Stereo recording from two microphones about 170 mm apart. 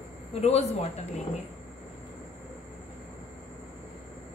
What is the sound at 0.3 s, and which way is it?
Speech, 40° left (ahead or behind).